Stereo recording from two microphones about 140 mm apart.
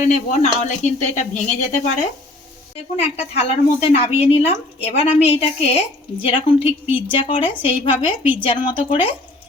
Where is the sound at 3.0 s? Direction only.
50° left (ahead or behind).